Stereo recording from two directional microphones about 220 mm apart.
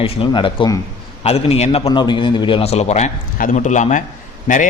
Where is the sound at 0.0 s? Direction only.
25° left (ahead or behind).